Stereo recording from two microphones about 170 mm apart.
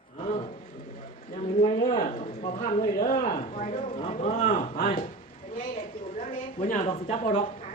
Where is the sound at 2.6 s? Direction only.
50° left (ahead or behind).